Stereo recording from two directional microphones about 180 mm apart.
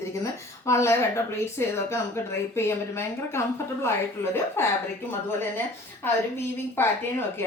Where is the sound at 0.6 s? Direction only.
15° left (ahead or behind).